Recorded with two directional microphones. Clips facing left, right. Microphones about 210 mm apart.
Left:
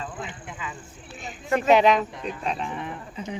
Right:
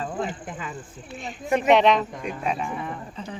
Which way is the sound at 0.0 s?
40° right (ahead or behind).